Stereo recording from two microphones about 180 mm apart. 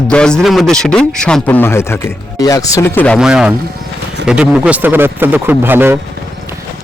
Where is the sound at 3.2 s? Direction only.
5° right (ahead or behind).